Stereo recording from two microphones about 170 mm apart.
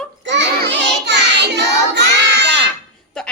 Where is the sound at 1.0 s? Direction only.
85° right.